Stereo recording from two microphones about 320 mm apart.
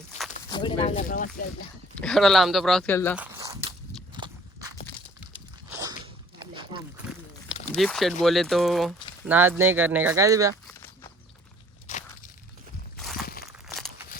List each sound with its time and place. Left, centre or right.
0.3 s speech: centre
2.0 s speech: centre
3.2 s walk: centre
6.4 s rowboat: centre
7.7 s speech: centre
10.7 s walk: centre
11.9 s a sound: left
13.2 s crumpling: left